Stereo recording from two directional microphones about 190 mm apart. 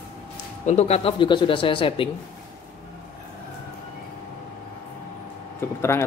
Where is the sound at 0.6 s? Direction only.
35° left (ahead or behind).